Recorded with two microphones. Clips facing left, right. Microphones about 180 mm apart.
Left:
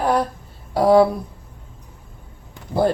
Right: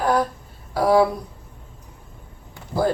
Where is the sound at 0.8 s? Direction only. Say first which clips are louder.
Left 3 dB; 25° left (ahead or behind).